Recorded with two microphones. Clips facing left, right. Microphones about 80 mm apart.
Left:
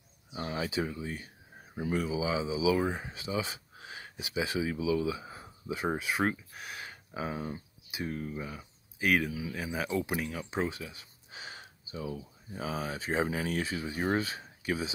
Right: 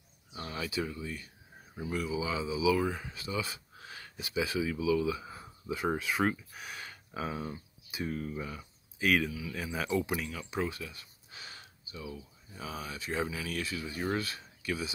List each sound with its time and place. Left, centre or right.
0.5 s speech: left
2.0 s speech: centre
2.9 s speech: left
3.2 s speech: centre
6.9 s a sound: centre
7.9 s speech: centre
9.3 s speech: left
9.6 s speech: centre
10.5 s a sound: left
12.1 s speech: left